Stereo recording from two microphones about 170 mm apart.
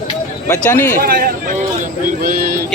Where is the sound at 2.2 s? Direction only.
55° right (ahead or behind).